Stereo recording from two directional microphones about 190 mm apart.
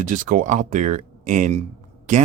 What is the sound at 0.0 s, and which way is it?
Speech, 45° right (ahead or behind).